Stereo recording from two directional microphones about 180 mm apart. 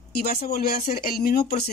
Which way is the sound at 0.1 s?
55° left (ahead or behind).